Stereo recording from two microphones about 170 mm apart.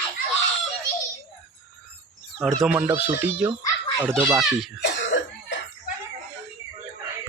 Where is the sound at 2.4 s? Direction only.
Centre (ahead or behind).